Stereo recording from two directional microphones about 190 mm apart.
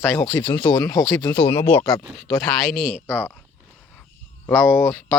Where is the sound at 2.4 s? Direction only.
50° right (ahead or behind).